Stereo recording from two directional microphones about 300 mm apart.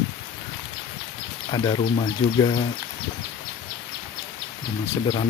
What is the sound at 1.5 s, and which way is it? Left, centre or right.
Speech, centre.